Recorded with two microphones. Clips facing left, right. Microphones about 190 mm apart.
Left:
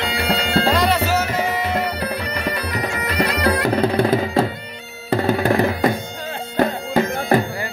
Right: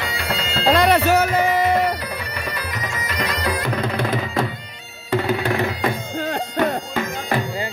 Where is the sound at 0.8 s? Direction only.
60° right (ahead or behind).